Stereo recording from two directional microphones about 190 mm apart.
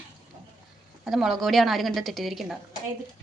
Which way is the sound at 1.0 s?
Centre (ahead or behind).